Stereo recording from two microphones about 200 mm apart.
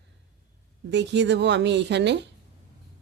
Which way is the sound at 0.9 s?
60° right (ahead or behind).